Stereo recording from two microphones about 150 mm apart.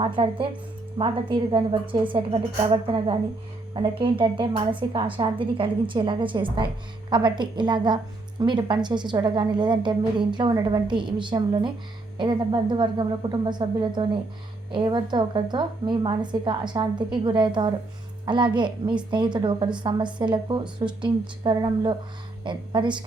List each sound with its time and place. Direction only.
0.0 s a woman's voice: 35° right (ahead or behind)